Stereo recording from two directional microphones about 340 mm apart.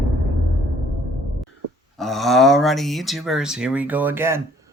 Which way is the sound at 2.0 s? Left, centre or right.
Centre.